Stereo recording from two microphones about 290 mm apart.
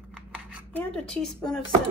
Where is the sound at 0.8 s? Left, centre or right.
Centre.